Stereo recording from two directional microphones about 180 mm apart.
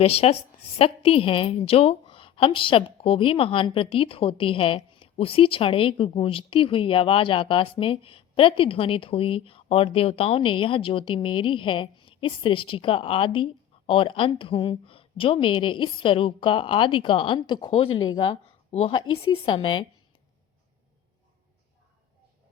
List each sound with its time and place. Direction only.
0.0 s a woman's voice: 35° left (ahead or behind)